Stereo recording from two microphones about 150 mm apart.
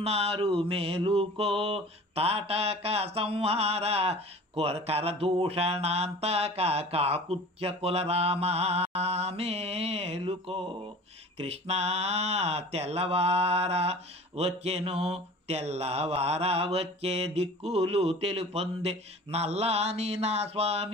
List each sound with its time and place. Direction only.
0.0 s mantra: 45° right (ahead or behind)